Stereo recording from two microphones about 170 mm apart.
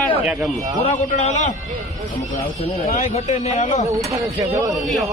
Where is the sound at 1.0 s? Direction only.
45° left (ahead or behind).